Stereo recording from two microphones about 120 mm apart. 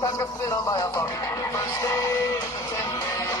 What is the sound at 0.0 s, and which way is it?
Music, 30° left (ahead or behind).